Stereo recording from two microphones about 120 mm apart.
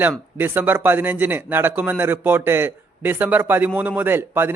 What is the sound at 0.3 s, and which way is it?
A man's voice, 15° right (ahead or behind).